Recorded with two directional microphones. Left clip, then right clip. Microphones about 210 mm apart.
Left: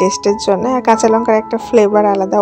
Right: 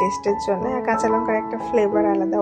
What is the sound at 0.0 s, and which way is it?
A woman's voice, 40° left (ahead or behind).